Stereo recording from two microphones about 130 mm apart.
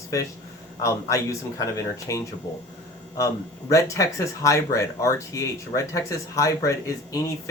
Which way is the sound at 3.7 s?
25° left (ahead or behind).